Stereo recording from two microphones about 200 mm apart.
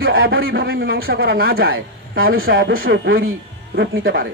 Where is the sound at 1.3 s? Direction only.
80° right.